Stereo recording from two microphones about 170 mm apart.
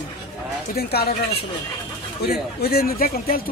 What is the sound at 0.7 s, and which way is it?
Speech, 70° left (ahead or behind).